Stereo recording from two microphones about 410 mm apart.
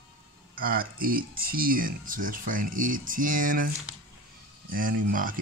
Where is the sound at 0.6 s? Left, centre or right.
Right.